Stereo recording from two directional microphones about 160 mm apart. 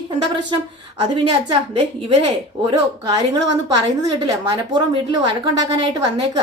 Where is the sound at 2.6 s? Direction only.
25° right (ahead or behind).